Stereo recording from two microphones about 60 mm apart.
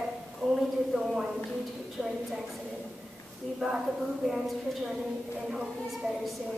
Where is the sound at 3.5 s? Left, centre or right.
Centre.